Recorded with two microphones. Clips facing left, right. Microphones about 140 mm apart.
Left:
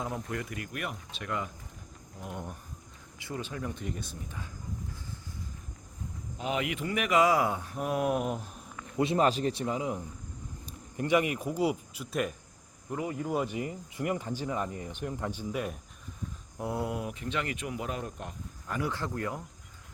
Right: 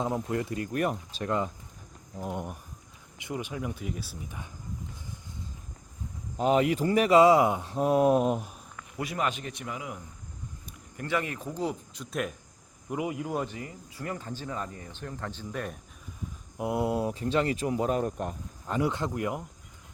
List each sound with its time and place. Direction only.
0.0 s speech: 25° right (ahead or behind)
2.3 s speech: 15° right (ahead or behind)
6.3 s speech: 40° right (ahead or behind)
9.0 s speech: 30° left (ahead or behind); by 12.3 s 5° left (ahead or behind)
12.9 s speech: 10° right (ahead or behind)
13.2 s speech: centre (ahead or behind)
13.5 s speech: 20° left (ahead or behind)
16.6 s speech: 15° right (ahead or behind); by 18.3 s 45° right (ahead or behind)
18.7 s speech: 20° right (ahead or behind)